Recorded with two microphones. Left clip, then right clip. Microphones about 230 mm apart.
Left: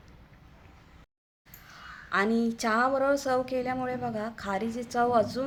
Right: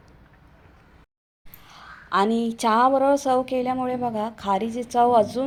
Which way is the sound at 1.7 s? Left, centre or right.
Centre.